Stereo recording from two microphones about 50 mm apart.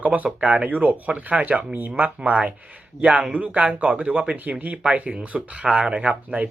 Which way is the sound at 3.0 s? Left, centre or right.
Centre.